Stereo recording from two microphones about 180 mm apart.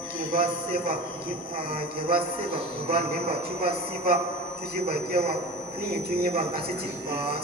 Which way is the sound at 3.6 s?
55° right (ahead or behind).